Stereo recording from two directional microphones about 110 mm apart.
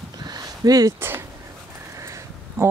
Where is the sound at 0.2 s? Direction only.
35° right (ahead or behind).